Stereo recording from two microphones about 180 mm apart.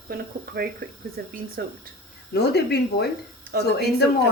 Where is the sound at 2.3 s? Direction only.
65° left (ahead or behind).